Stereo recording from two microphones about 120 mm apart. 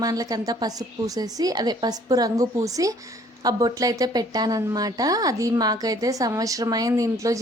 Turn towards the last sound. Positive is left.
turn(degrees=-30)  # may be behind; listen again after turning